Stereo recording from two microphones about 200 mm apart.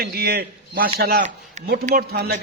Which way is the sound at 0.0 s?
50° right (ahead or behind).